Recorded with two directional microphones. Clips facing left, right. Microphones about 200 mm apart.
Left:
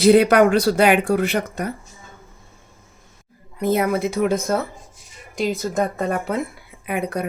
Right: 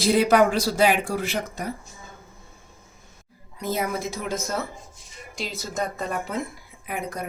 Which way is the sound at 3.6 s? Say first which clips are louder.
Left 8 dB; 60° left (ahead or behind).